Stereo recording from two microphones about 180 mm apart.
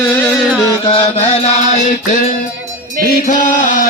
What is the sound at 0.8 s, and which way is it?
Music, 30° left (ahead or behind).